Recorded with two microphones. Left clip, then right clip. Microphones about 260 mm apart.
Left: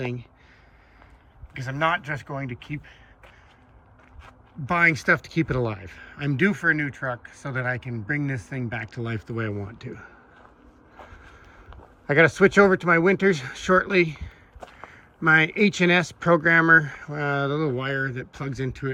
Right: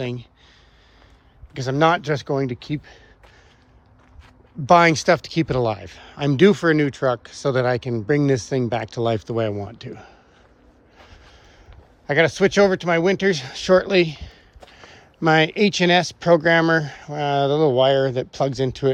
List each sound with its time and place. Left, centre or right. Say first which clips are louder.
0.0 s speech: right 3 dB; centre
1.5 s speech: right 6 dB; centre
4.6 s speech: right 6 dB; centre
12.0 s speech: even; centre